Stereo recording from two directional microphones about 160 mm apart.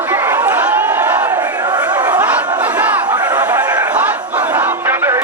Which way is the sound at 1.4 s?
25° right (ahead or behind).